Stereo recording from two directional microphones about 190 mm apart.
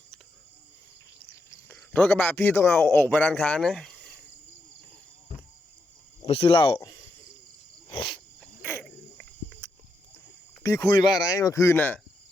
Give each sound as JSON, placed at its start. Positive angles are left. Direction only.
{"t": 1.6, "sound": "a man's voice", "side_deg": 10}
{"t": 6.2, "sound": "speech", "side_deg": 30}
{"t": 7.9, "sound": "speech", "side_deg": 25}
{"t": 8.6, "sound": "cricket", "side_deg": 10}
{"t": 10.6, "sound": "speech", "side_deg": 15}